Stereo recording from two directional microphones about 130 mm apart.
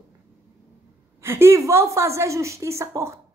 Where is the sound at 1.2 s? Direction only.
20° right (ahead or behind).